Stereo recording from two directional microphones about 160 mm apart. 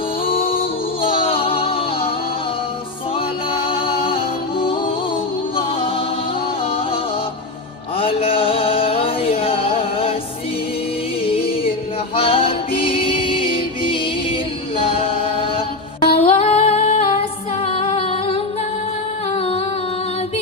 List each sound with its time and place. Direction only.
0.3 s music: 35° left (ahead or behind)
3.5 s music: 35° left (ahead or behind)
7.9 s music: 35° left (ahead or behind)
11.3 s music: 35° left (ahead or behind)